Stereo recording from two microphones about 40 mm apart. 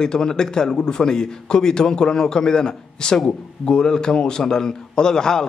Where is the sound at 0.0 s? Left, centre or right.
Centre.